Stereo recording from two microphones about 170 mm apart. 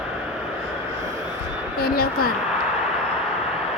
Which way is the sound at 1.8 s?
60° left (ahead or behind).